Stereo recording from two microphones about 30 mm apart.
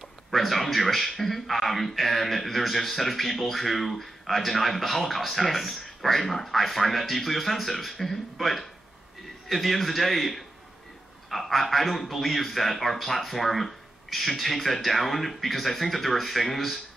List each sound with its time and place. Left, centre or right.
0.3 s a man's voice: centre